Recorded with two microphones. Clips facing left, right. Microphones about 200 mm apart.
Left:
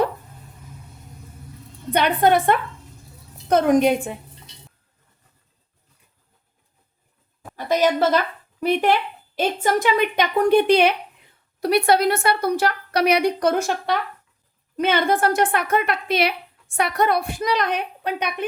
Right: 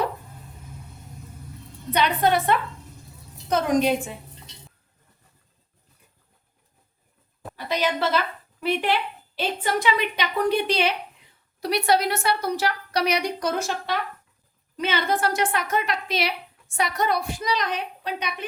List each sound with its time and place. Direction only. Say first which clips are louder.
1.9 s a woman's voice: left 4 dB; 55° left (ahead or behind)
7.5 s a sound: left 6 dB; 45° left (ahead or behind)
8.6 s a woman's voice: left 5 dB; 45° left (ahead or behind)